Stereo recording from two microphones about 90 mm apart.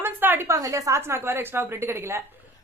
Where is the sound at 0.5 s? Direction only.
35° right (ahead or behind).